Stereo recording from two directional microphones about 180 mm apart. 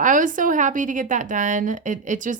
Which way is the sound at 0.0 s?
45° right (ahead or behind).